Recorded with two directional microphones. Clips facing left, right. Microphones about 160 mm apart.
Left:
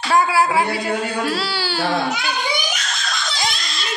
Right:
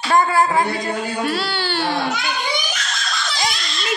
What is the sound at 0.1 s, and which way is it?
A woman's voice, 5° left (ahead or behind).